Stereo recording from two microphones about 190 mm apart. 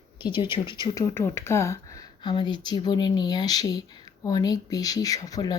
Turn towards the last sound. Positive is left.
turn(degrees=20)  # may be behind; listen again after turning